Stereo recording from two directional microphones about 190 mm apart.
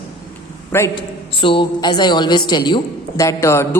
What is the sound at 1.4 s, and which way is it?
A woman's voice, 25° left (ahead or behind).